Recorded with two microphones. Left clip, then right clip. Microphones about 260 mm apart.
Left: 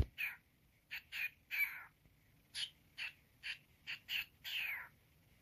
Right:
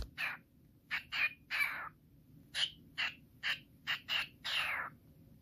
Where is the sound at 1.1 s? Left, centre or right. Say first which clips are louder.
Right 4 dB; centre.